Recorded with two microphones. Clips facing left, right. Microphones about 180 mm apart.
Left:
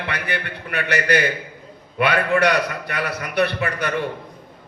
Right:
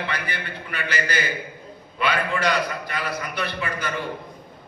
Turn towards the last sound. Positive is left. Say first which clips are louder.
# left 5 dB
turn(degrees=65)  # may be behind; listen again after turning